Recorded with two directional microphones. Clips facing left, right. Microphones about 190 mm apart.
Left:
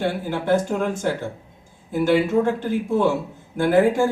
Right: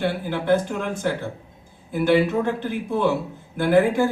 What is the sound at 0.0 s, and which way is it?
A man's voice, 45° left (ahead or behind).